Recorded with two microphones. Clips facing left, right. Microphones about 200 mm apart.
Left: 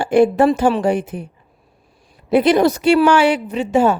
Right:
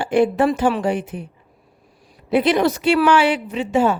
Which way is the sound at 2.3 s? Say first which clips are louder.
Left 3 dB; 40° left (ahead or behind).